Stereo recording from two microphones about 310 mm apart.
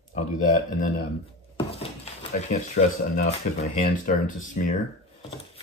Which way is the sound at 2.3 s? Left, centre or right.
Left.